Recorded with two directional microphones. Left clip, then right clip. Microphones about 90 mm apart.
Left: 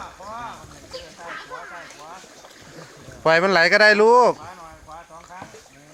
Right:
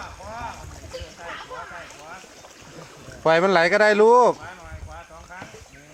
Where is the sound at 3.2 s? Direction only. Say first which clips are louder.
Left 1 dB; 30° right (ahead or behind).